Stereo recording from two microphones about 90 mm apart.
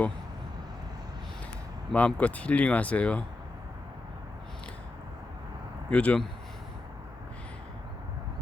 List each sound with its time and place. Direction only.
1.9 s speech: 10° left (ahead or behind)
5.9 s speech: 15° left (ahead or behind)